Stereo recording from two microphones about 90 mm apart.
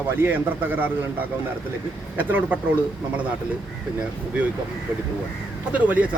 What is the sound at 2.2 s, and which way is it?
Speech, 20° right (ahead or behind).